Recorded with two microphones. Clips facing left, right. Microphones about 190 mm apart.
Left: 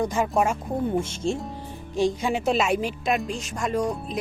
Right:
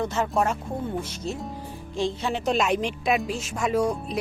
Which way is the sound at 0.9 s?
25° left (ahead or behind).